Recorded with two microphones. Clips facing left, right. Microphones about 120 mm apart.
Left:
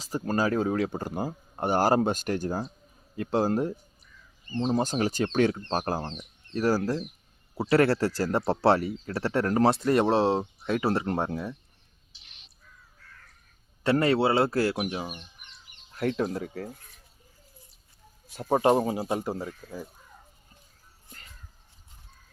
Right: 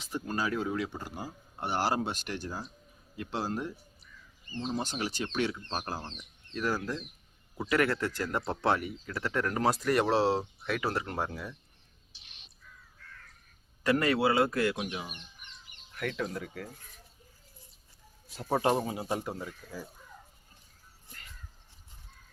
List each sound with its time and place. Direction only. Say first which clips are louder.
0.0 s speech: left 6 dB; 40° left (ahead or behind)
13.8 s speech: left 4 dB; 30° left (ahead or behind)
15.9 s speech: left 7 dB; 30° left (ahead or behind)
18.3 s speech: left 6 dB; 25° left (ahead or behind)